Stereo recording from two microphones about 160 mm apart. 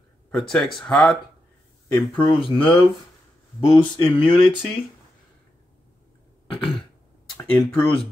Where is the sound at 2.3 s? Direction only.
30° left (ahead or behind).